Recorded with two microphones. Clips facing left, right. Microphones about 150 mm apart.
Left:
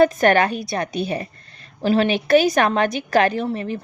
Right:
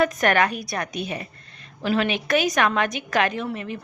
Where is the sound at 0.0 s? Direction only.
30° left (ahead or behind).